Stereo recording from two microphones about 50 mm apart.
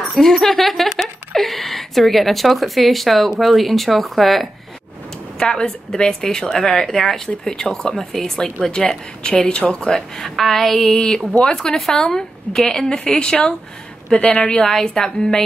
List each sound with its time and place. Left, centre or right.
0.1 s speech: centre
5.4 s speech: centre